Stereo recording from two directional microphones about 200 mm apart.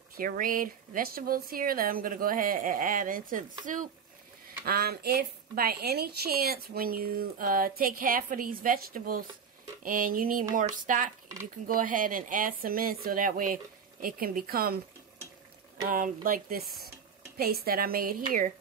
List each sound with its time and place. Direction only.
0.1 s a woman's voice: 45° right (ahead or behind)
11.6 s a woman's voice: 45° right (ahead or behind)
15.9 s a woman's voice: 45° right (ahead or behind)